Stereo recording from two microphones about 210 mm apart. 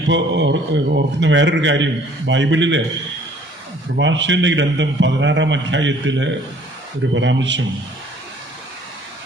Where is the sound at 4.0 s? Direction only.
60° right (ahead or behind).